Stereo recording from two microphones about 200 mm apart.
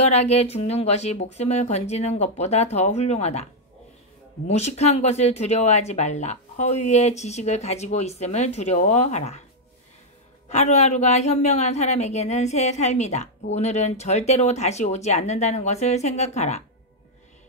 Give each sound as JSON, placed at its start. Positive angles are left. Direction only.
{"t": 0.0, "sound": "a woman's voice", "side_deg": 35}
{"t": 4.5, "sound": "a woman's voice", "side_deg": 35}
{"t": 10.5, "sound": "a woman's voice", "side_deg": 35}